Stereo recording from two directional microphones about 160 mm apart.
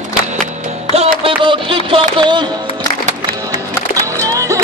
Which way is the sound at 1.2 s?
30° right (ahead or behind).